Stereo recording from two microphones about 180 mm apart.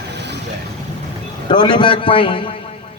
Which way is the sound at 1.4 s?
25° left (ahead or behind).